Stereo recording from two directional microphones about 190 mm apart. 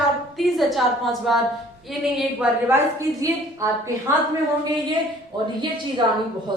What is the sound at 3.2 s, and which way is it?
Speech, 15° right (ahead or behind).